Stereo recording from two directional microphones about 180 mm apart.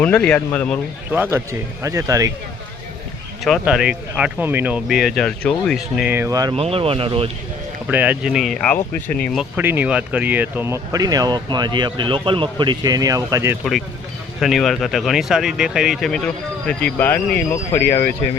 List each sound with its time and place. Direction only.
0.0 s speech: 5° left (ahead or behind)
1.1 s speech: 10° right (ahead or behind)
3.4 s speech: centre (ahead or behind); by 6.5 s 20° right (ahead or behind)
6.5 s speech: 30° right (ahead or behind)
7.9 s speech: 10° right (ahead or behind); by 9.4 s 5° left (ahead or behind)
9.4 s speech: 10° right (ahead or behind)
14.4 s speech: centre (ahead or behind)